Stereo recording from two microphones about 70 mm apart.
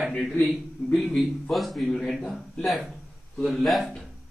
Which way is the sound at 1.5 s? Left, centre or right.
Centre.